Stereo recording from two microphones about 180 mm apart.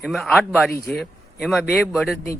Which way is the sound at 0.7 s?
15° left (ahead or behind).